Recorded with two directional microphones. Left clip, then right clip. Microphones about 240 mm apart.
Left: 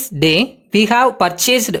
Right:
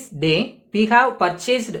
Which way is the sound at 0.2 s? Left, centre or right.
Left.